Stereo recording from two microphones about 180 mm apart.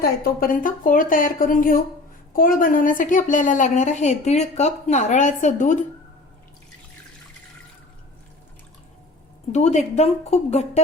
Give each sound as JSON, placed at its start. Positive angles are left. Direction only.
{"t": 0.0, "sound": "a woman's voice", "side_deg": 50}
{"t": 9.5, "sound": "speech", "side_deg": 40}